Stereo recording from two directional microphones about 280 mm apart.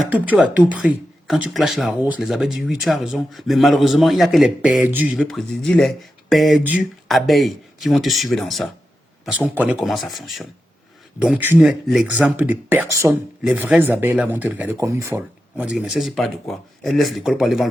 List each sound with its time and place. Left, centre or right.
0.1 s speech: centre